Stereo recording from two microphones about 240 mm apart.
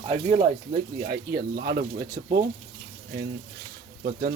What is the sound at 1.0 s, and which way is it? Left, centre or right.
Speech, right.